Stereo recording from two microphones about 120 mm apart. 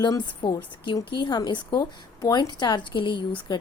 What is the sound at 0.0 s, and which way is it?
A woman's voice, 40° left (ahead or behind).